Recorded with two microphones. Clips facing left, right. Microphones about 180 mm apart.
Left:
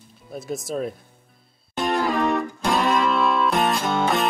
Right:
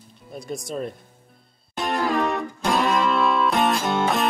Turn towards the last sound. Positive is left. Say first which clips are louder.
# even
turn(degrees=0)  # may be behind; listen again after turning